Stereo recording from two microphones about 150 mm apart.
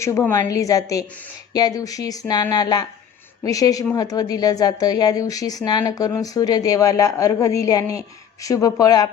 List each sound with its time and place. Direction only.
0.0 s a woman's voice: 20° left (ahead or behind)